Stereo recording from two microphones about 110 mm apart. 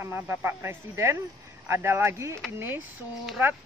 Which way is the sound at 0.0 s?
20° right (ahead or behind).